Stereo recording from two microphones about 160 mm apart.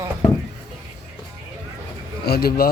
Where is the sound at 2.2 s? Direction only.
80° left.